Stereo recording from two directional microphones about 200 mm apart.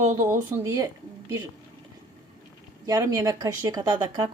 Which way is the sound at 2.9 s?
20° right (ahead or behind).